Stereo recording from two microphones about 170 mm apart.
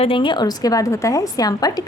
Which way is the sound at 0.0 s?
30° left (ahead or behind).